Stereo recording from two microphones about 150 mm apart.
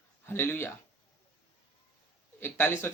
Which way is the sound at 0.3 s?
15° left (ahead or behind).